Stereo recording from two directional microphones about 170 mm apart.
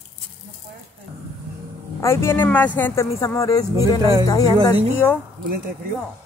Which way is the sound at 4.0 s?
25° right (ahead or behind).